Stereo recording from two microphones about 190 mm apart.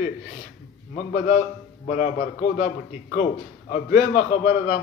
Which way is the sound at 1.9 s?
45° left (ahead or behind).